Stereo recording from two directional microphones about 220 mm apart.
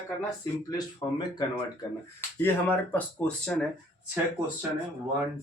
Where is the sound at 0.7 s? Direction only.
20° left (ahead or behind).